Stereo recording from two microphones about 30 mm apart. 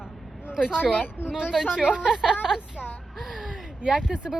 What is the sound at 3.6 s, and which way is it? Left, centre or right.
Speech, right.